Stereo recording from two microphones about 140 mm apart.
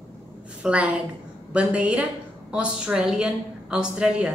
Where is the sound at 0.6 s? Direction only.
10° right (ahead or behind).